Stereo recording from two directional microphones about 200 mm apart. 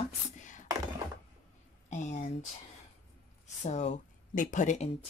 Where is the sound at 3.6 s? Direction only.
35° left (ahead or behind).